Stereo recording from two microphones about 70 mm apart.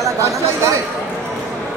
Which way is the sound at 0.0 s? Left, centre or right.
Right.